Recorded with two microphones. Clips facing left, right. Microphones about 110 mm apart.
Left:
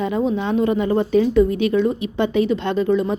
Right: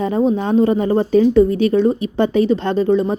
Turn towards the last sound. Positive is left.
turn(degrees=-35)  # may be behind; listen again after turning